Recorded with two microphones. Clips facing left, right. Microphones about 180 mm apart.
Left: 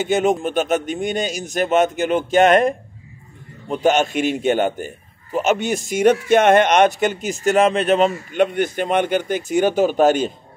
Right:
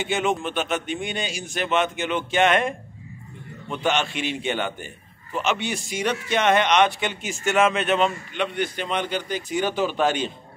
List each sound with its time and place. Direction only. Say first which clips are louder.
0.0 s a man's voice: left 6 dB; 40° left (ahead or behind)